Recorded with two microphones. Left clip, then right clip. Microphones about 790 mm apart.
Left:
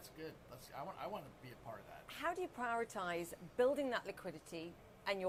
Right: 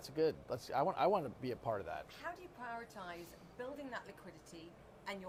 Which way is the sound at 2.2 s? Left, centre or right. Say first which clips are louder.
Left 6 dB; left.